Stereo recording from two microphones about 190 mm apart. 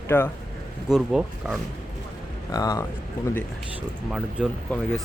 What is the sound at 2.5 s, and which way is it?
Speech, 20° left (ahead or behind).